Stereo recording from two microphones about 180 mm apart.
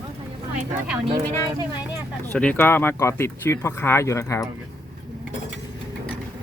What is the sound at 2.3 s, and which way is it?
Speech, 10° left (ahead or behind).